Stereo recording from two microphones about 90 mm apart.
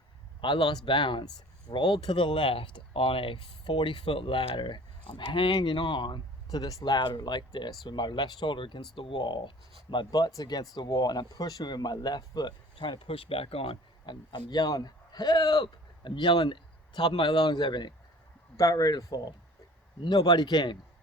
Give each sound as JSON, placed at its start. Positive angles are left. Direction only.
{"t": 0.4, "sound": "speech", "side_deg": 60}
{"t": 6.9, "sound": "speech", "side_deg": 60}
{"t": 18.5, "sound": "speech", "side_deg": 40}